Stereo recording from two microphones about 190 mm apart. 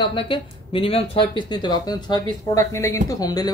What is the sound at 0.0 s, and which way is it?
Speech, 25° left (ahead or behind).